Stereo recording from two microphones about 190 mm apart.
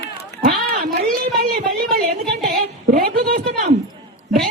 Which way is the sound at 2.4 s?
50° right (ahead or behind).